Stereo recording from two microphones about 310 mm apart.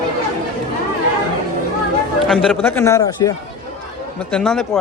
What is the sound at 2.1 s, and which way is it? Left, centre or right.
A man's voice, centre.